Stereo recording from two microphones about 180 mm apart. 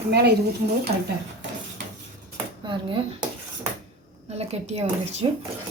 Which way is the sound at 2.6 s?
25° right (ahead or behind).